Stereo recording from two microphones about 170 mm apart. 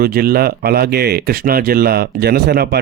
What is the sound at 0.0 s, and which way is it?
Speech, 65° right (ahead or behind).